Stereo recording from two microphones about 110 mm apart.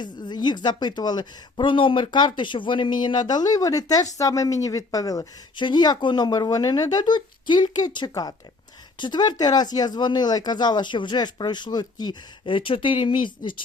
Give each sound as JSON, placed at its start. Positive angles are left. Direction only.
{"t": 0.0, "sound": "speech", "side_deg": 40}